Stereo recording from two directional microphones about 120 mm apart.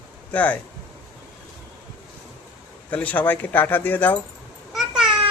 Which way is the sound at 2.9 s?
15° left (ahead or behind).